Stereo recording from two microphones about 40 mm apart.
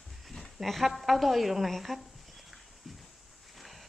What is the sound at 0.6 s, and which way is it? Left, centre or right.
A woman's voice, centre.